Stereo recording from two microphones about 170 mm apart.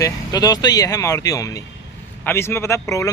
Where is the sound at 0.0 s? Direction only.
20° left (ahead or behind).